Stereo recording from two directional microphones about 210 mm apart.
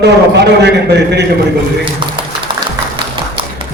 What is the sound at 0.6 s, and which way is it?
Speech, 55° right (ahead or behind).